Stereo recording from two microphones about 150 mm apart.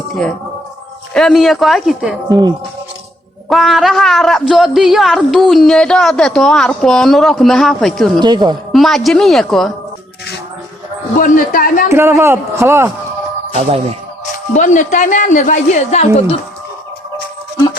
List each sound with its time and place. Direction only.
1.1 s speech: centre (ahead or behind)
3.5 s speech: centre (ahead or behind)
8.2 s a woman's voice: 30° right (ahead or behind)
8.7 s speech: centre (ahead or behind)
11.2 s a woman's voice: 65° left (ahead or behind)
11.9 s a man's voice: 20° right (ahead or behind)
13.5 s speech: 40° right (ahead or behind)
14.5 s a woman's voice: 55° left (ahead or behind)